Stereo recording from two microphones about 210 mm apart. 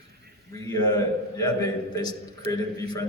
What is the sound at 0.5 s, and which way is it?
A man's voice, 15° left (ahead or behind).